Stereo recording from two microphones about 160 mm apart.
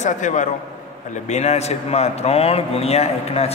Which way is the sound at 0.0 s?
50° left (ahead or behind).